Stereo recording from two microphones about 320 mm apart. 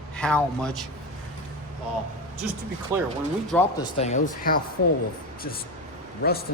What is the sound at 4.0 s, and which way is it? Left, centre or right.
Speech, left.